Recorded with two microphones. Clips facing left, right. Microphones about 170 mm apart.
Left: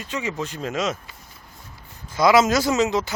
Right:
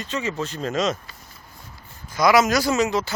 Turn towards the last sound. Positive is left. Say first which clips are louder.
# left 1 dB
turn(degrees=20)  # may be behind; listen again after turning